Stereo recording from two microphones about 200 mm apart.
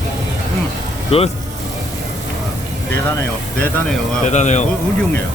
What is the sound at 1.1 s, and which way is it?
Speech, 30° left (ahead or behind).